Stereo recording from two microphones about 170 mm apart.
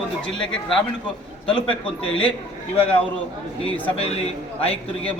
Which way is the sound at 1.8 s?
30° left (ahead or behind).